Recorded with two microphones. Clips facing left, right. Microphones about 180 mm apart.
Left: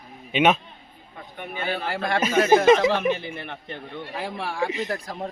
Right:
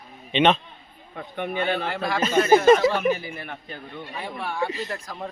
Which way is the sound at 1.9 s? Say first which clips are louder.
Left 1 dB; 10° left (ahead or behind).